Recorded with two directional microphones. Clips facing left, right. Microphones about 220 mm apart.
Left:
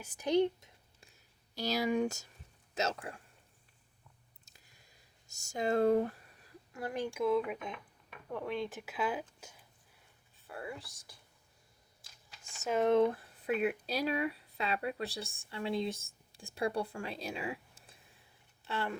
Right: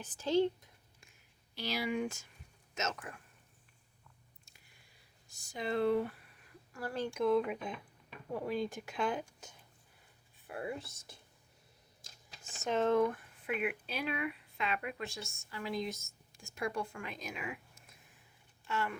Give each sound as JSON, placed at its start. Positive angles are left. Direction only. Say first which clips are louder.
{"t": 0.0, "sound": "a woman's voice", "louder": "left 1 dB", "side_deg": 15}
{"t": 1.5, "sound": "speech", "louder": "left 4 dB", "side_deg": 40}
{"t": 4.4, "sound": "chewing", "louder": "left 5 dB", "side_deg": 40}
{"t": 5.3, "sound": "speech", "louder": "left 4 dB", "side_deg": 45}
{"t": 6.7, "sound": "speech", "louder": "even", "side_deg": 15}
{"t": 9.4, "sound": "a sound", "louder": "even", "side_deg": 10}
{"t": 10.4, "sound": "speech", "louder": "right 3 dB", "side_deg": -20}
{"t": 12.6, "sound": "a woman's voice", "louder": "left 1 dB", "side_deg": 10}
{"t": 12.9, "sound": "speech", "louder": "left 3 dB", "side_deg": 25}